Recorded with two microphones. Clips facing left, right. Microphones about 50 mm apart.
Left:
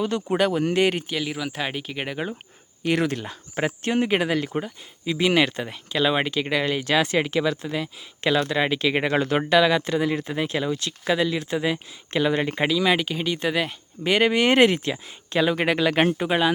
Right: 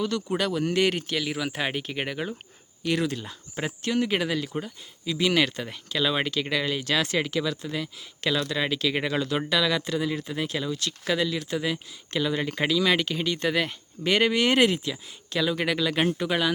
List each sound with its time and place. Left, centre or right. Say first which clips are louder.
0.0 s speech: left 4 dB; left
0.8 s speech: left 1 dB; centre
1.1 s speech: left 1 dB; centre
2.8 s speech: left 3 dB; left
12.6 s speech: left 1 dB; centre; by 16.1 s left
16.1 s speech: left 4 dB; left